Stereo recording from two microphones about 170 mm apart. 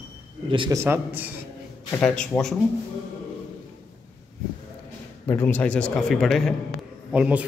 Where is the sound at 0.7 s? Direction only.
15° right (ahead or behind).